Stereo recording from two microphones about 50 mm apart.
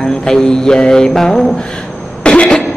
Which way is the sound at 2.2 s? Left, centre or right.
Centre.